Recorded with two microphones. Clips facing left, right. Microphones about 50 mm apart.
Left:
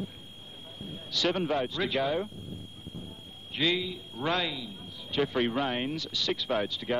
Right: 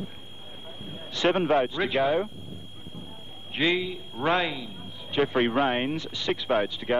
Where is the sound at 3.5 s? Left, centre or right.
Right.